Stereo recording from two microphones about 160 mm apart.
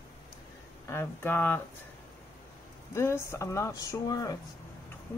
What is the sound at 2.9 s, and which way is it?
Speech, 15° left (ahead or behind).